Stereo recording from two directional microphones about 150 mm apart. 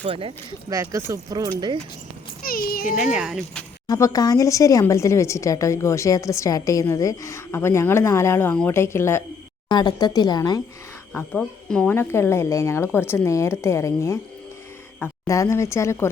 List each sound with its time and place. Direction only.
0.0 s speech: 35° right (ahead or behind)
0.7 s speech: 20° right (ahead or behind)
2.4 s a child's voice: 80° left
3.0 s speech: 5° right (ahead or behind)
3.8 s speech: 25° left (ahead or behind)
9.6 s speech: 30° left (ahead or behind)
11.1 s speech: 10° left (ahead or behind)
15.3 s speech: 20° left (ahead or behind)